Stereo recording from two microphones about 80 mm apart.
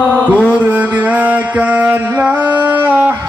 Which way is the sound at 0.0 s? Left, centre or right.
Right.